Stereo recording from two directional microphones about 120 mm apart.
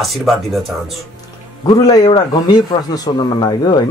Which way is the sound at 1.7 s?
35° left (ahead or behind).